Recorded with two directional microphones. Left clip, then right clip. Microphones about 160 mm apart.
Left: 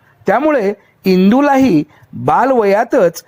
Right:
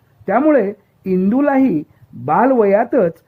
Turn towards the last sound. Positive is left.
turn(degrees=30)  # may be behind; listen again after turning